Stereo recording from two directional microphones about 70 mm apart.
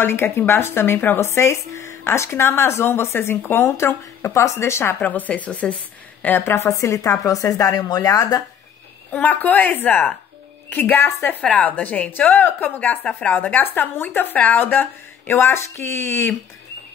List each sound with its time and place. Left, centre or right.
0.0 s speech: left
5.0 s speech: left
6.2 s speech: left
6.7 s speech: left
9.1 s speech: left
11.4 s speech: left